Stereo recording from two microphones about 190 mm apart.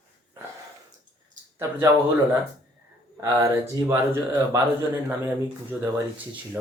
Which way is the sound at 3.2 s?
15° right (ahead or behind).